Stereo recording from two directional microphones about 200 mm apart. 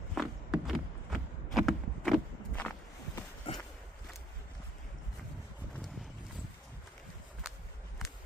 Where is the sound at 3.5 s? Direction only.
30° left (ahead or behind).